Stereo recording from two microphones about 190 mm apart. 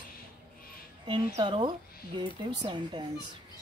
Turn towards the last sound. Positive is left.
turn(degrees=-25)  # may be behind; listen again after turning